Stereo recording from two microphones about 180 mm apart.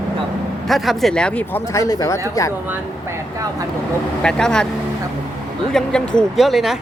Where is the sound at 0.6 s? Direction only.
Centre (ahead or behind); by 2.2 s 20° left (ahead or behind).